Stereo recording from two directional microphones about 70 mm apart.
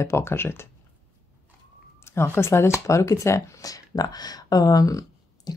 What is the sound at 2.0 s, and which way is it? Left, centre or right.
Speech, left.